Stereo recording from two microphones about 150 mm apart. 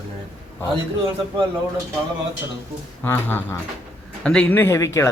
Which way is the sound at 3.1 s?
15° left (ahead or behind).